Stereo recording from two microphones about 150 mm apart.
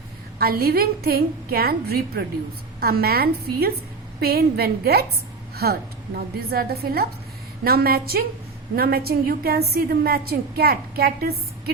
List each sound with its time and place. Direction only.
0.3 s a woman's voice: 90° right
6.1 s a woman's voice: 90° right